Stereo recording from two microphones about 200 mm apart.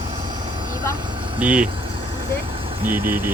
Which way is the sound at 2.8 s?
45° right (ahead or behind).